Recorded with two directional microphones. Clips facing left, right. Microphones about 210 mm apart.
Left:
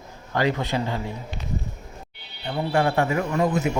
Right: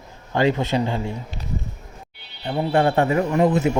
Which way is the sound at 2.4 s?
35° right (ahead or behind).